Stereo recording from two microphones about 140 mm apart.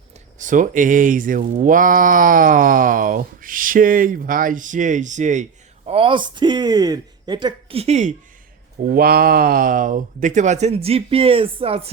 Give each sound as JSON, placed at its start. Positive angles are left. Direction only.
{"t": 0.3, "sound": "speech", "side_deg": -65}
{"t": 7.8, "sound": "speech", "side_deg": -55}
{"t": 8.8, "sound": "speech", "side_deg": -90}